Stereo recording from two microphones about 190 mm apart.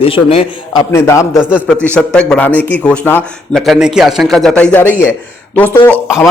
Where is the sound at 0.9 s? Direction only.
15° left (ahead or behind).